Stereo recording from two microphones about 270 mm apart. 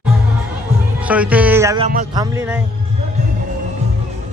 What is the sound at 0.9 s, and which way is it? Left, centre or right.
Speech, centre.